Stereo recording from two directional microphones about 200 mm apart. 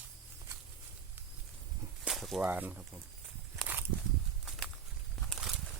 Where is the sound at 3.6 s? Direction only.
10° right (ahead or behind).